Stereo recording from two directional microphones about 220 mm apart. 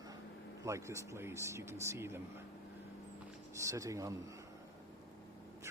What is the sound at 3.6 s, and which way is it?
Speech, 15° right (ahead or behind).